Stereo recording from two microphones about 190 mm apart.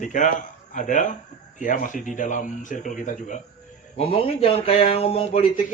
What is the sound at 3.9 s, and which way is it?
A man's voice, 30° left (ahead or behind).